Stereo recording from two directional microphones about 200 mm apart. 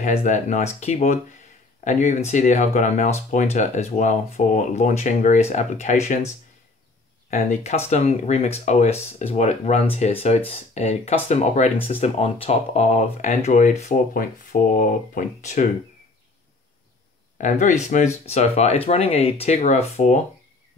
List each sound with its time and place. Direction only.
0.0 s speech: 35° left (ahead or behind)
17.4 s speech: 40° left (ahead or behind)